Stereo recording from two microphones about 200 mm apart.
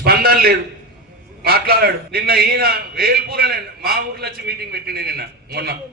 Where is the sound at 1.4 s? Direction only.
50° right (ahead or behind).